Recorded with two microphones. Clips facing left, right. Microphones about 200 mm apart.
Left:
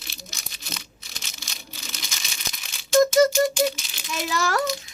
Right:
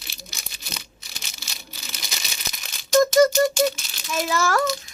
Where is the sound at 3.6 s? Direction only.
20° left (ahead or behind).